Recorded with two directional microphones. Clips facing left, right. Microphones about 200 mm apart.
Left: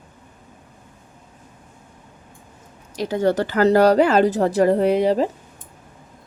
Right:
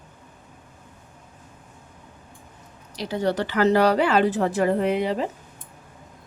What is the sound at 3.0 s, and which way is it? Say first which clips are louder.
A woman's voice: left 5 dB; 45° left (ahead or behind).